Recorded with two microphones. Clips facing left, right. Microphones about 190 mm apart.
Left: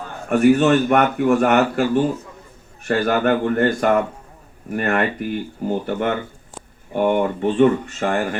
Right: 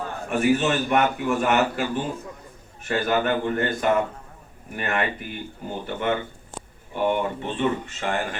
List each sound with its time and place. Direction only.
0.4 s a man's voice: 50° left (ahead or behind)